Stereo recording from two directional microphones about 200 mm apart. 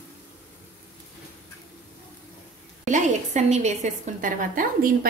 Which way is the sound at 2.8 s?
35° right (ahead or behind).